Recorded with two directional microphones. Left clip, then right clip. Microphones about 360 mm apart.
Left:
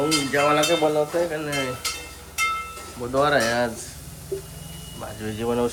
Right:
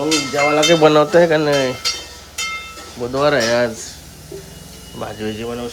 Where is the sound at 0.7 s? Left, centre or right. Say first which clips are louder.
Right 9 dB; right.